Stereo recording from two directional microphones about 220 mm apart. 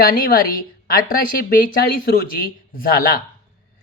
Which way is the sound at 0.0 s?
40° left (ahead or behind).